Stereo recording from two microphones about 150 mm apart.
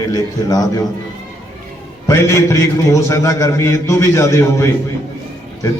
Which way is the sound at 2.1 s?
20° left (ahead or behind).